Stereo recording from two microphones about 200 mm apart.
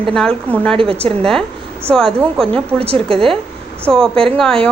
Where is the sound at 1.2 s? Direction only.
5° left (ahead or behind).